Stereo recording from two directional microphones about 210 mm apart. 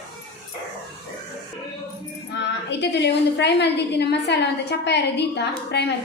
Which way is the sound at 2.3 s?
55° left (ahead or behind).